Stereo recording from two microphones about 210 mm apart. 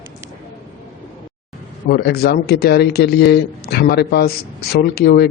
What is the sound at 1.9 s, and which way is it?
A man's voice, 50° left (ahead or behind).